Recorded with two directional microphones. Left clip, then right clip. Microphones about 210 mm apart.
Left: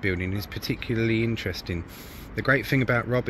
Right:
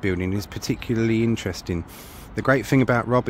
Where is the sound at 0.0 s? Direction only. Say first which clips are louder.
Right 3 dB; 40° right (ahead or behind).